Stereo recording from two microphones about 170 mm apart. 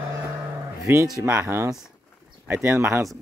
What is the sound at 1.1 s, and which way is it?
Speech, 15° right (ahead or behind).